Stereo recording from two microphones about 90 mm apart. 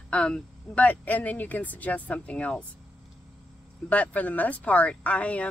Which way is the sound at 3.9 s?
15° left (ahead or behind).